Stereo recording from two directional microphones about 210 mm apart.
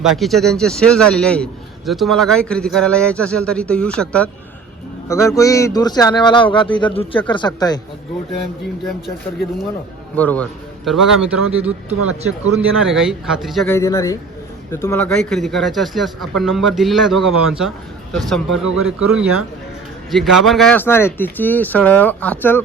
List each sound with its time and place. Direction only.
0.0 s a man's voice: centre (ahead or behind); by 7.8 s 20° left (ahead or behind)
10.2 s a man's voice: 5° left (ahead or behind)
11.9 s speech: 90° right
12.7 s a man's voice: centre (ahead or behind)
13.7 s a man's voice: 15° left (ahead or behind)